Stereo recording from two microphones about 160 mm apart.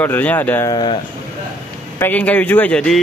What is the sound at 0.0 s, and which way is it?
Speech, 10° left (ahead or behind).